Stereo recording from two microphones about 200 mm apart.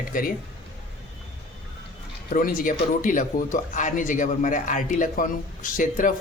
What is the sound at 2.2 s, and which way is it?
Speech, 45° left (ahead or behind).